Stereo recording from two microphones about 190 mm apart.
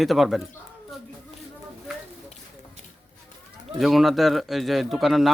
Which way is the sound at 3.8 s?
Centre (ahead or behind).